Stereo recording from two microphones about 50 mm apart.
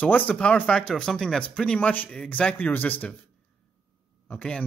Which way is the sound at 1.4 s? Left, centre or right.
Left.